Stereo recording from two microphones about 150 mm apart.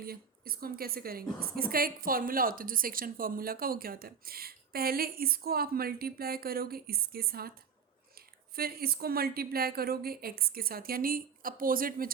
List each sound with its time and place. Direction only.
0.0 s a woman's voice: 80° right
8.5 s a woman's voice: 90° right; by 12.1 s 70° right (ahead or behind)